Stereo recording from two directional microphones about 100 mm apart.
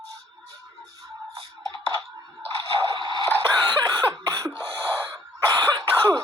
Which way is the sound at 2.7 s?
60° right (ahead or behind).